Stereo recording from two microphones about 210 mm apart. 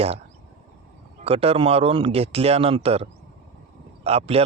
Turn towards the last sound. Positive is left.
turn(degrees=-30)  # may be behind; listen again after turning